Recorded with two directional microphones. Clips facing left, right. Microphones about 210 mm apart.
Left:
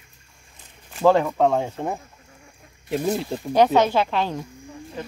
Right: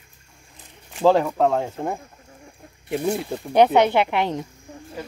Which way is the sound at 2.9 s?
15° right (ahead or behind).